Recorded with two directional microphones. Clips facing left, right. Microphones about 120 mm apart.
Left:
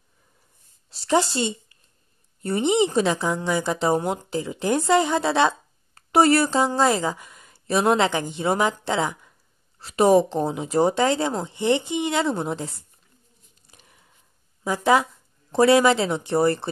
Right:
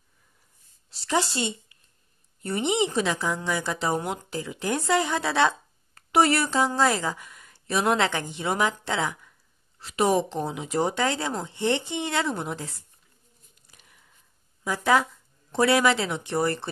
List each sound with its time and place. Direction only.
1.0 s a woman's voice: 30° left (ahead or behind)
5.9 s a woman's voice: 35° left (ahead or behind); by 8.4 s 20° left (ahead or behind)
8.4 s speech: 30° left (ahead or behind)
9.8 s speech: 35° left (ahead or behind)
11.5 s speech: 15° left (ahead or behind)
12.3 s speech: 30° left (ahead or behind)
14.6 s speech: 20° left (ahead or behind)